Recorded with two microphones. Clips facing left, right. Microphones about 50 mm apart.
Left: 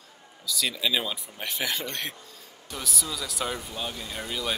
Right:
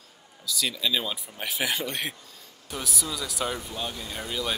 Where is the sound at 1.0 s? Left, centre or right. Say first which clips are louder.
Right 1 dB; centre.